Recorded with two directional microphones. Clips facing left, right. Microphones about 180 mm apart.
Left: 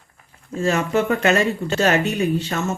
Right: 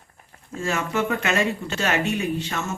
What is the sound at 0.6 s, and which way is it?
Speech, 35° left (ahead or behind).